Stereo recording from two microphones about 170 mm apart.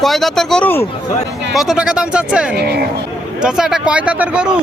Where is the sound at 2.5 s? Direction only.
70° right (ahead or behind).